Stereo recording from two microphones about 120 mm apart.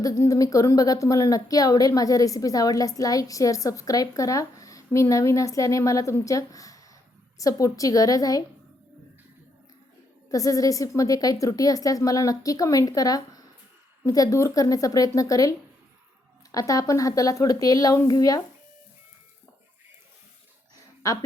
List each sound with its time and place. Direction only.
0.0 s a woman's voice: 30° left (ahead or behind)
10.3 s a woman's voice: 30° left (ahead or behind)
21.0 s a woman's voice: 30° left (ahead or behind)